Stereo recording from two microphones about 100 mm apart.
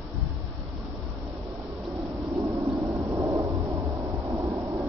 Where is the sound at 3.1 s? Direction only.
30° right (ahead or behind).